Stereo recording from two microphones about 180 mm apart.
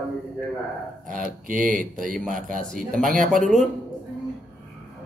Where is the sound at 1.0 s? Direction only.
50° right (ahead or behind).